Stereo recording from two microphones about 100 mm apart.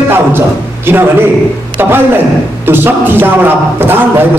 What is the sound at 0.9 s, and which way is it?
A man's voice, 25° right (ahead or behind).